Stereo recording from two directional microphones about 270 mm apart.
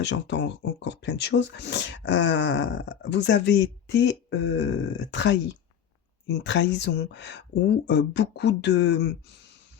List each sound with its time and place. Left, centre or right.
0.0 s speech: left